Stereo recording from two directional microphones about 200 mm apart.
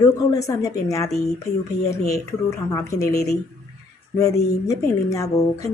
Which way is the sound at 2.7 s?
15° left (ahead or behind).